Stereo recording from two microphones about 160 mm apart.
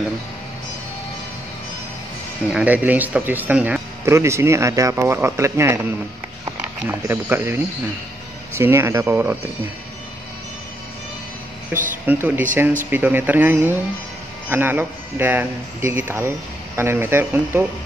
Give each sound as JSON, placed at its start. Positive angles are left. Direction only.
{"t": 2.5, "sound": "speech", "side_deg": -10}
{"t": 11.7, "sound": "speech", "side_deg": -10}